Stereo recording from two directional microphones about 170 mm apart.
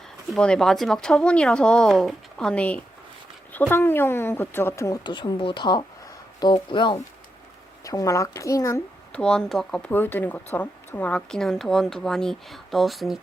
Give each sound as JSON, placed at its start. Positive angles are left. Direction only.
{"t": 0.3, "sound": "speech", "side_deg": 5}
{"t": 9.2, "sound": "speech", "side_deg": 5}